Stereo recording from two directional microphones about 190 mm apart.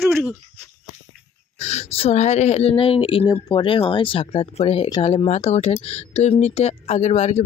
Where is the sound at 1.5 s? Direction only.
35° left (ahead or behind).